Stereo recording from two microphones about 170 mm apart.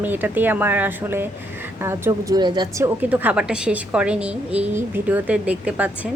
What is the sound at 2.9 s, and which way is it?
A woman's voice, 10° right (ahead or behind).